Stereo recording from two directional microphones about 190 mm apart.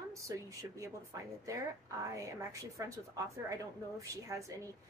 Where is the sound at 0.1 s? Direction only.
15° right (ahead or behind).